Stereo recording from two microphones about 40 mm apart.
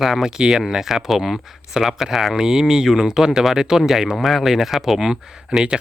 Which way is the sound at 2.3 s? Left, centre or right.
Centre.